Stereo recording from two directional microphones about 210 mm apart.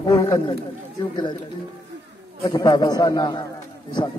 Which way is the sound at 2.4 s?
20° left (ahead or behind).